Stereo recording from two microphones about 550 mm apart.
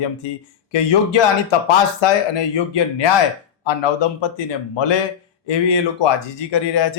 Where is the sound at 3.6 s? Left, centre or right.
Left.